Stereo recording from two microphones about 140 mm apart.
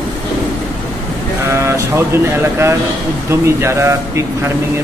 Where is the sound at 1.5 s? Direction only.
20° right (ahead or behind).